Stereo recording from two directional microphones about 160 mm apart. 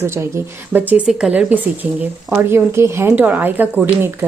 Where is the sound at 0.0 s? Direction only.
15° right (ahead or behind).